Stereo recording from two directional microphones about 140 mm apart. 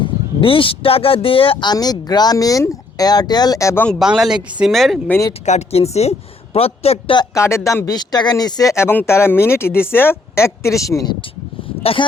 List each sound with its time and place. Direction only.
0.0 s speech: 40° left (ahead or behind); by 3.8 s 20° left (ahead or behind)
3.8 s speech: 5° right (ahead or behind)
5.5 s speech: 50° left (ahead or behind)
7.2 s speech: 20° left (ahead or behind)
11.8 s speech: 40° left (ahead or behind)